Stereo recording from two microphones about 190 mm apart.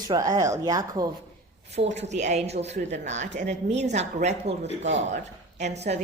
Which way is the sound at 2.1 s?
35° right (ahead or behind).